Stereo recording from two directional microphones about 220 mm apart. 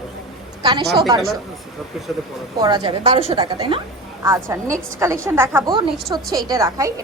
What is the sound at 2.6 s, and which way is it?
A woman's voice, 20° right (ahead or behind).